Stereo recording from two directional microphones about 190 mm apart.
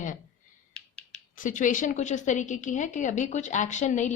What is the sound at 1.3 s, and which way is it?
Speech, 45° left (ahead or behind).